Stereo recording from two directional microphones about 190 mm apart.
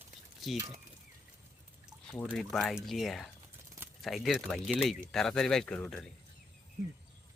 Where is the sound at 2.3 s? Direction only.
Centre (ahead or behind).